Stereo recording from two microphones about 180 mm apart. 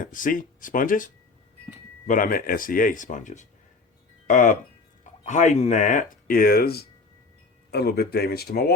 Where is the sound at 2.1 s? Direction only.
50° left (ahead or behind).